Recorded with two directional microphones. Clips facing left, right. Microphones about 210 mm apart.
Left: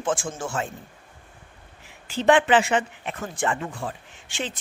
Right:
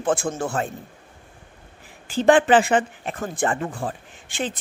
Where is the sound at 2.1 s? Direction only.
45° right (ahead or behind).